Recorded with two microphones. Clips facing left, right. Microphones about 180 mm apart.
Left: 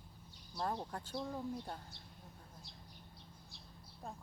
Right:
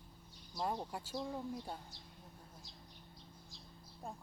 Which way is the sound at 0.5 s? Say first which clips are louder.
Even; 15° right (ahead or behind).